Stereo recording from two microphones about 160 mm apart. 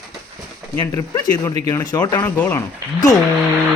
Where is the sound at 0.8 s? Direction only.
20° left (ahead or behind).